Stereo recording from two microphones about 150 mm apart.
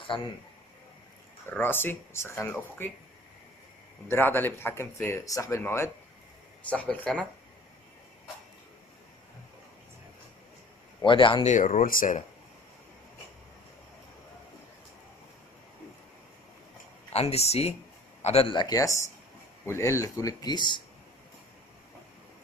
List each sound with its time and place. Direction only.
0.1 s speech: 35° left (ahead or behind)
1.5 s speech: 15° left (ahead or behind)
4.1 s speech: 15° left (ahead or behind)
11.0 s speech: 35° left (ahead or behind)
11.4 s speech: 55° left (ahead or behind)
17.1 s speech: 45° left (ahead or behind); by 20.6 s 25° left (ahead or behind)